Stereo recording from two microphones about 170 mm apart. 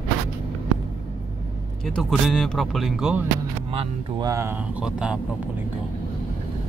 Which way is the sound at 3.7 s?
35° right (ahead or behind).